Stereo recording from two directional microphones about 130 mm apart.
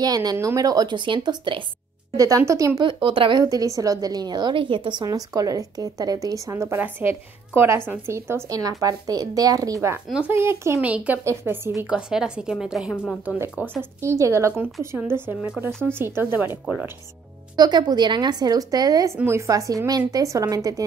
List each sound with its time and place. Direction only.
0.0 s a woman's voice: 30° right (ahead or behind)
2.1 s a woman's voice: 25° right (ahead or behind)
2.8 s a woman's voice: 40° right (ahead or behind)
3.4 s a woman's voice: 25° right (ahead or behind)
10.0 s a woman's voice: 5° right (ahead or behind)
10.3 s a woman's voice: 20° right (ahead or behind)
11.9 s a woman's voice: 5° right (ahead or behind)
17.6 s a woman's voice: 30° right (ahead or behind)